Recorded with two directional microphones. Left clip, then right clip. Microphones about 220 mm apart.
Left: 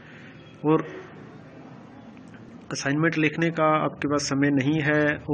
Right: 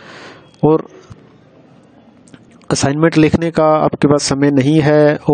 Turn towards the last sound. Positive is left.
turn(degrees=-60)  # may be behind; listen again after turning